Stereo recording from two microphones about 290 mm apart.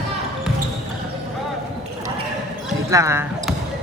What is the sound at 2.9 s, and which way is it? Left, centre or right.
Clip-clop, centre.